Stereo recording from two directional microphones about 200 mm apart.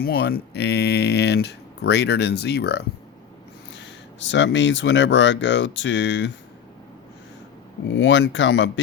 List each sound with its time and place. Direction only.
0.0 s speech: 50° left (ahead or behind)
3.8 s speech: 65° left (ahead or behind)
7.9 s speech: 65° left (ahead or behind)